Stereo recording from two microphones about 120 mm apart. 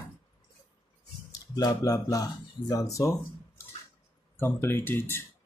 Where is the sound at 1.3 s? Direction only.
30° left (ahead or behind).